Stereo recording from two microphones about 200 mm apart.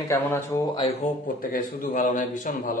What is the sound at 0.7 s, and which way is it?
Speech, 30° left (ahead or behind).